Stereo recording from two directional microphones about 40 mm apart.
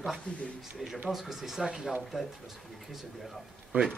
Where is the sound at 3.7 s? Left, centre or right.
Right.